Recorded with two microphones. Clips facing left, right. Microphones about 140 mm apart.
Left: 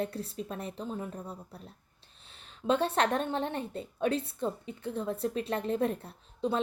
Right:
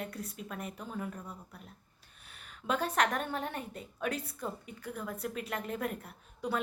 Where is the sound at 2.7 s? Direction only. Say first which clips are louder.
Left 4 dB; 30° left (ahead or behind).